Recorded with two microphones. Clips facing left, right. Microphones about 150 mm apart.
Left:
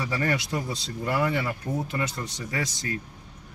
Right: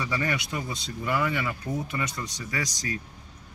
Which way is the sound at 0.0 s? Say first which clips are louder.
Left 2 dB; 35° left (ahead or behind).